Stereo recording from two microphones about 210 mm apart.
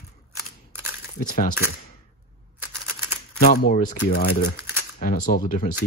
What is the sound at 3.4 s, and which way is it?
Speech, 45° left (ahead or behind).